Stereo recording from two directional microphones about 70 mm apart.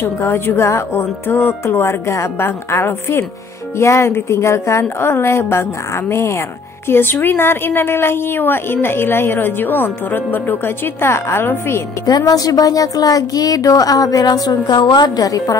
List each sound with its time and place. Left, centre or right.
0.0 s speech: left
12.1 s speech: left